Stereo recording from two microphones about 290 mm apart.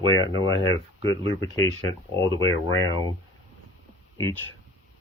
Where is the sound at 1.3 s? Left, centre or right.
Centre.